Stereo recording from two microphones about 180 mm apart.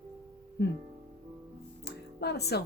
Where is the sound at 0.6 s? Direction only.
65° left (ahead or behind).